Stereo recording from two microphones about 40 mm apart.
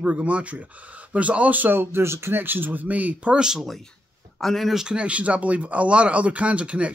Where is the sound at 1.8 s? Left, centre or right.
Right.